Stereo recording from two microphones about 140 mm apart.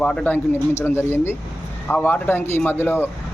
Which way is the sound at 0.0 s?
5° left (ahead or behind).